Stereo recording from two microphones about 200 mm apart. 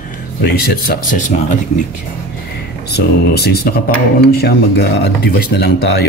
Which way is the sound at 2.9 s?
55° left (ahead or behind).